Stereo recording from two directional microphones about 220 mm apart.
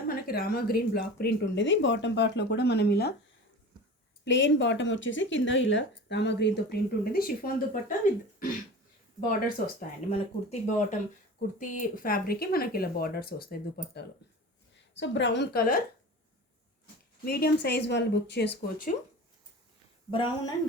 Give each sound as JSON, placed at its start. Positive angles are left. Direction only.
{"t": 0.1, "sound": "speech", "side_deg": 45}
{"t": 4.3, "sound": "speech", "side_deg": 55}
{"t": 9.6, "sound": "speech", "side_deg": 40}
{"t": 14.9, "sound": "speech", "side_deg": 55}
{"t": 17.2, "sound": "speech", "side_deg": 45}
{"t": 20.1, "sound": "speech", "side_deg": 20}